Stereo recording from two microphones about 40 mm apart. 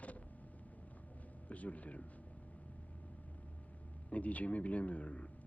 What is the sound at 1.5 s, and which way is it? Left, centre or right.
Speech, left.